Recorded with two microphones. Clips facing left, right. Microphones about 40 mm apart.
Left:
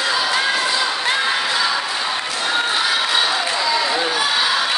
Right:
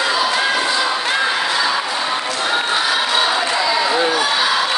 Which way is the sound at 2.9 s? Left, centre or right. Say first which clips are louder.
Right 2 dB; centre.